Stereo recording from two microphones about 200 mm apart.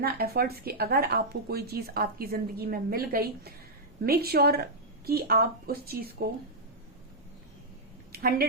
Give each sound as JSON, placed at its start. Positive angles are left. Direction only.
{"t": 0.0, "sound": "speech", "side_deg": -50}
{"t": 8.1, "sound": "speech", "side_deg": -50}